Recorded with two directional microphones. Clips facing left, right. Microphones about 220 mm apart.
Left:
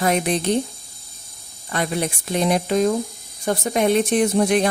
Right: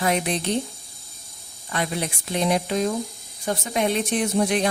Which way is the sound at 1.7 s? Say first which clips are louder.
Left 4 dB; 50° left (ahead or behind).